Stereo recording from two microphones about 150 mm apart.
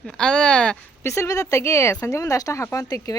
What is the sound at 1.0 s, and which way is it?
Speech, 20° left (ahead or behind).